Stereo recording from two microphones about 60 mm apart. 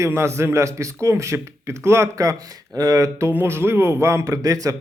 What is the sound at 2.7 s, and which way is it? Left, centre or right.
Speech, right.